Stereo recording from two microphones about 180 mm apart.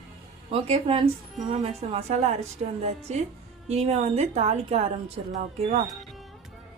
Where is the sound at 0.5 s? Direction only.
30° right (ahead or behind).